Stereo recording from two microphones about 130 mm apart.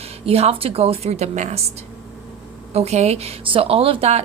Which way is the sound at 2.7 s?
55° right (ahead or behind).